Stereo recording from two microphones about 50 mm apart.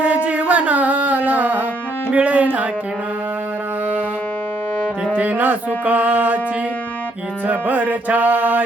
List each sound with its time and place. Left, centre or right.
0.3 s music: right
5.1 s music: right
7.4 s music: right